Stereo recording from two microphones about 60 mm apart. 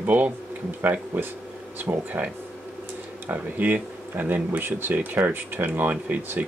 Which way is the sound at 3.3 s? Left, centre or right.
Right.